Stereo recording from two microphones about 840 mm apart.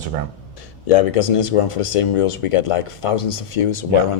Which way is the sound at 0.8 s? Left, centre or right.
Left.